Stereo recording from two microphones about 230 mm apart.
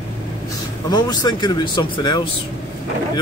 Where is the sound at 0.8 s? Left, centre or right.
Centre.